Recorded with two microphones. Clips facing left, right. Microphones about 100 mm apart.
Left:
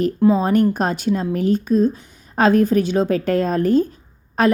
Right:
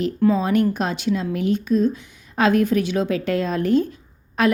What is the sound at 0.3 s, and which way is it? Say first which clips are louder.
A woman's voice: left 3 dB; 40° left (ahead or behind).